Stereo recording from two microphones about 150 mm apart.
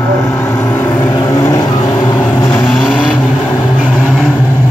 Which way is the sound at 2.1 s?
15° left (ahead or behind).